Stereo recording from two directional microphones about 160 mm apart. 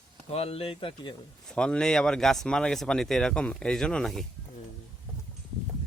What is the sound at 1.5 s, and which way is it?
Speech, 5° left (ahead or behind).